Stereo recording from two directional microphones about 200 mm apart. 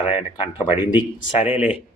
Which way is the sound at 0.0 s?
25° left (ahead or behind).